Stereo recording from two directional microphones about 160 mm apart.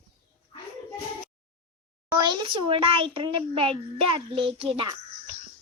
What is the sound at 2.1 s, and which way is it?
A child's voice, 30° right (ahead or behind).